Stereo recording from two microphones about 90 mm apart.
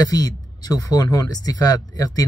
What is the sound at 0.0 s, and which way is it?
Speech, 45° left (ahead or behind).